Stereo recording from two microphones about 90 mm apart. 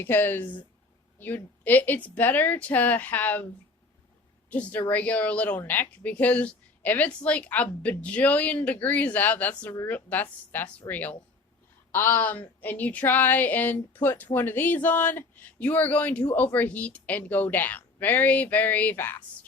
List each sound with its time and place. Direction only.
0.0 s speech: 20° left (ahead or behind)
4.4 s a woman's voice: 15° left (ahead or behind)